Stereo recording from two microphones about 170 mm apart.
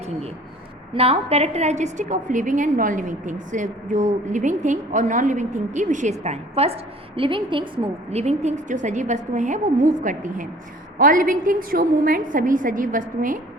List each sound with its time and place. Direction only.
0.9 s a woman's voice: 35° right (ahead or behind); by 13.4 s 50° right (ahead or behind)